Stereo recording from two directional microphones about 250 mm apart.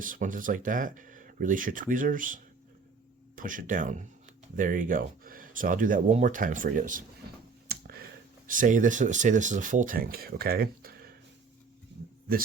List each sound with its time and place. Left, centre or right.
0.0 s speech: right
7.7 s a sound: right
8.4 s speech: right